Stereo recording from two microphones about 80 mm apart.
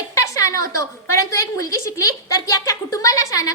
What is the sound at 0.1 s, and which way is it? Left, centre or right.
A woman's voice, left.